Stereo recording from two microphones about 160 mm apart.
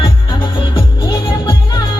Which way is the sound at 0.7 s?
20° left (ahead or behind).